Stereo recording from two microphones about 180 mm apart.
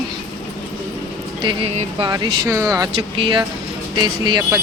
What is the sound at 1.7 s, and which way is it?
Speech, 40° right (ahead or behind).